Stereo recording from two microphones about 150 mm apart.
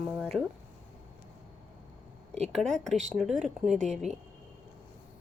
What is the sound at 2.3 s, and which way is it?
Speech, 45° right (ahead or behind).